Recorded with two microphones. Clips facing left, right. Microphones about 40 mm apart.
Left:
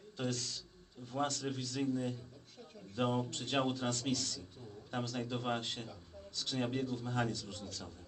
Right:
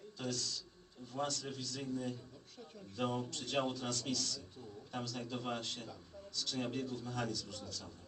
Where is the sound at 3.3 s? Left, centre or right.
Left.